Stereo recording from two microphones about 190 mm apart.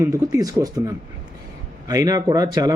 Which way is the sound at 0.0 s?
15° right (ahead or behind).